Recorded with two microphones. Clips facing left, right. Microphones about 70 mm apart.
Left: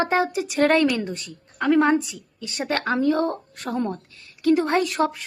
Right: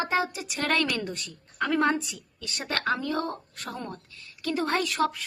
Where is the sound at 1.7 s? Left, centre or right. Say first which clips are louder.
Left 7 dB; centre; by 3.9 s left.